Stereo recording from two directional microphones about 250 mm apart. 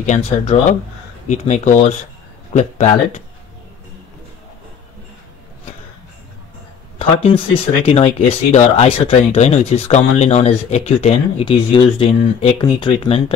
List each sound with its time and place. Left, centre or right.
0.0 s speech: left
7.0 s speech: left